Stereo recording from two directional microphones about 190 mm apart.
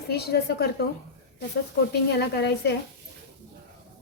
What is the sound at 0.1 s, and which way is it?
Speech, 60° left (ahead or behind).